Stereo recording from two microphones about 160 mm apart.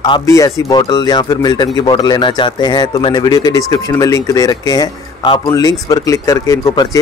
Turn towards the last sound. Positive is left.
turn(degrees=25)  # may be behind; listen again after turning